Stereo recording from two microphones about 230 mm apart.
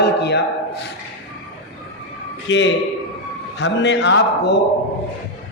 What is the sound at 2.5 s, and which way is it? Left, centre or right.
A man's voice, left.